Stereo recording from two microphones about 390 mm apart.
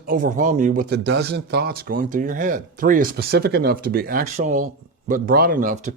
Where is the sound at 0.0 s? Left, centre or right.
Right.